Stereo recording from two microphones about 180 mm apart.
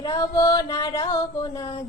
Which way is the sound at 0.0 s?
20° left (ahead or behind).